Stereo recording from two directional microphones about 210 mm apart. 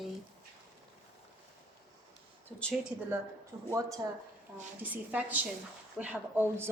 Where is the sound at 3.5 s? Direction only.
15° right (ahead or behind).